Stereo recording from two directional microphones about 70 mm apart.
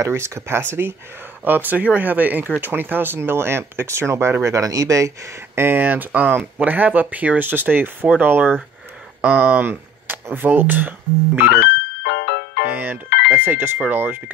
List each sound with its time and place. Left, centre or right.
0.0 s speech: right
12.6 s a sound: right
13.7 s speech: right